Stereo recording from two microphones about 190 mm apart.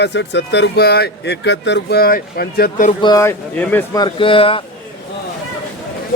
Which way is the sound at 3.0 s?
15° left (ahead or behind).